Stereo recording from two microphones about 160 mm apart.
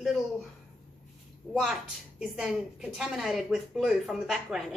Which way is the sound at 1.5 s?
Centre (ahead or behind).